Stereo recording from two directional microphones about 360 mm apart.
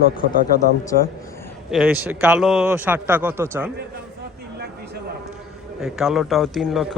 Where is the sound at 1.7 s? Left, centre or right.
Centre.